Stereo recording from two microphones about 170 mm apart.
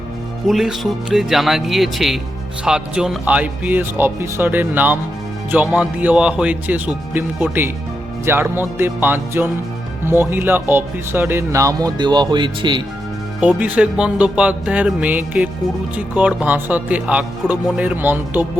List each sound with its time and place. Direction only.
0.4 s speech: centre (ahead or behind); by 12.8 s 25° right (ahead or behind)
13.4 s speech: 10° right (ahead or behind)